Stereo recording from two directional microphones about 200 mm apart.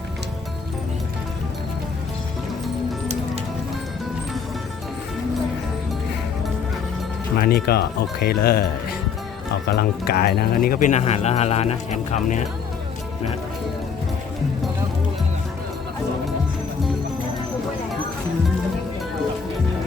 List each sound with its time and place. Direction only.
7.3 s speech: 50° left (ahead or behind)